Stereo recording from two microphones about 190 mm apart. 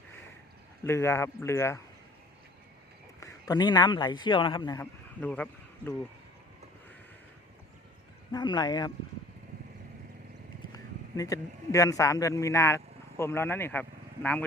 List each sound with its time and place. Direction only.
0.9 s speech: 15° left (ahead or behind)
3.2 s a man's voice: 20° left (ahead or behind)
4.8 s speech: 10° left (ahead or behind)
8.3 s speech: 20° left (ahead or behind)
11.2 s speech: 15° left (ahead or behind)